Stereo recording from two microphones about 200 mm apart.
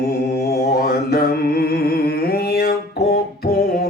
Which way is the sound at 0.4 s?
50° left (ahead or behind).